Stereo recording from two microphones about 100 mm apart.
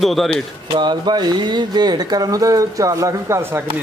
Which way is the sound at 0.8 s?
50° right (ahead or behind).